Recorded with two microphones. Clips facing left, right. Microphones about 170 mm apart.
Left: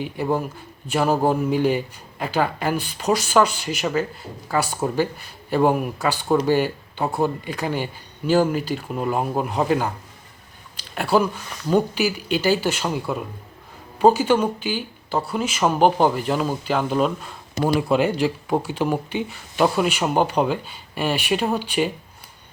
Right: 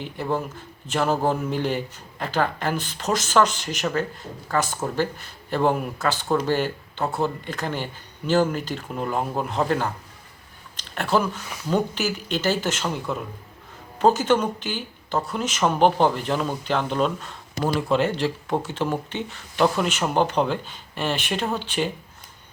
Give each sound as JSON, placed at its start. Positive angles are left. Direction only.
{"t": 0.0, "sound": "a man's voice", "side_deg": 10}